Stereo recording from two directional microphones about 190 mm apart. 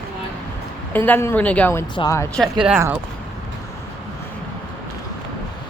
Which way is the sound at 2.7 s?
10° right (ahead or behind).